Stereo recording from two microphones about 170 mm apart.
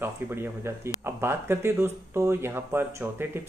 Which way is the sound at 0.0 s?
15° right (ahead or behind).